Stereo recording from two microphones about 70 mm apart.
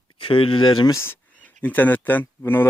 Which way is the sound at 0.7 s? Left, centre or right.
Left.